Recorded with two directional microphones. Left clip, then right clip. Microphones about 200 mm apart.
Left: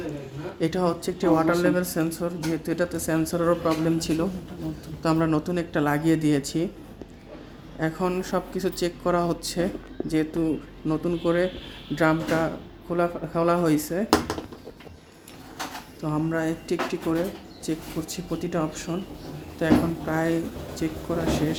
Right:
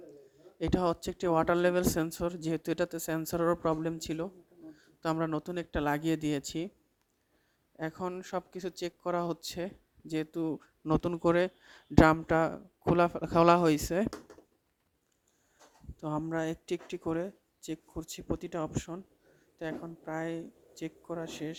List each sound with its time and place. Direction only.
0.6 s speech: 50° right (ahead or behind)
7.8 s speech: 40° right (ahead or behind)
16.0 s speech: 45° right (ahead or behind)